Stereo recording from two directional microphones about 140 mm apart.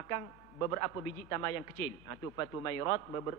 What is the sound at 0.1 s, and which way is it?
A man's voice, 20° left (ahead or behind).